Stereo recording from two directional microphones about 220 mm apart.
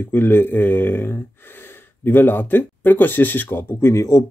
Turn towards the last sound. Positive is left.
turn(degrees=15)  # may be behind; listen again after turning